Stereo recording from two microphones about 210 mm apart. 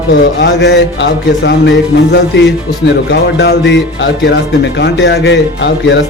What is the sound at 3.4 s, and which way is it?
Speech, 55° left (ahead or behind).